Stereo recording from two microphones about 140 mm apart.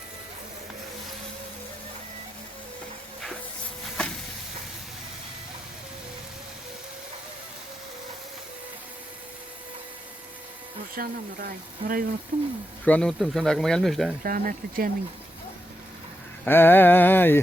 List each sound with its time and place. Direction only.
10.9 s speech: 90° right
12.3 s speech: 65° right (ahead or behind)
12.8 s speech: 10° left (ahead or behind)
14.3 s speech: 90° right
16.5 s mantra: 15° left (ahead or behind)